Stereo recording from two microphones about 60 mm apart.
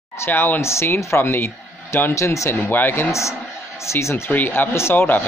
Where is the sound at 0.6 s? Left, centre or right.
Left.